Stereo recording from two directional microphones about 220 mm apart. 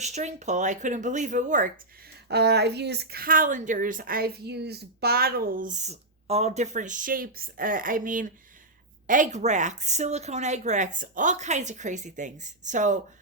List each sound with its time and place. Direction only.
0.0 s speech: 30° right (ahead or behind)
2.3 s speech: 50° right (ahead or behind)